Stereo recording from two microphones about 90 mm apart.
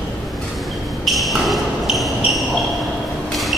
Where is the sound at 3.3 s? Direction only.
Centre (ahead or behind).